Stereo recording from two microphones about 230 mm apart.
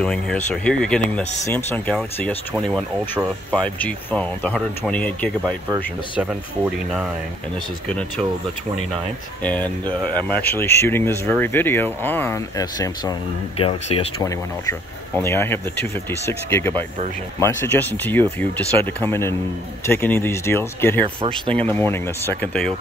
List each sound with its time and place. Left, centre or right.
0.0 s speech: centre
6.1 s speech: centre
9.4 s speech: centre; by 14.0 s left
14.2 s speech: centre
21.2 s speech: right
21.5 s speech: centre